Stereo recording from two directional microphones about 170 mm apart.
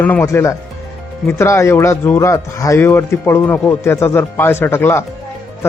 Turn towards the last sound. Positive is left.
turn(degrees=15)  # may be behind; listen again after turning